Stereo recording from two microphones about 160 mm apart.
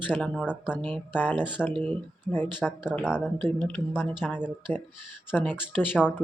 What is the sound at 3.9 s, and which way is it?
Speech, 5° right (ahead or behind).